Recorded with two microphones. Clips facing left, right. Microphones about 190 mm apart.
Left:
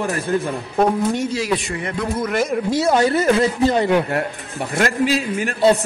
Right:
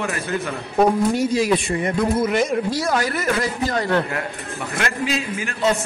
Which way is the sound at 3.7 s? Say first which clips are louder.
Left 4 dB; 15° left (ahead or behind).